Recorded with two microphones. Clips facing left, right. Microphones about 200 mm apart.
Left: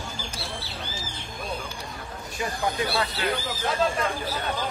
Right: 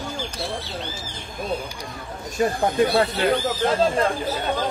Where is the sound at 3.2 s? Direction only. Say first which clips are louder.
Right 8 dB; 35° right (ahead or behind).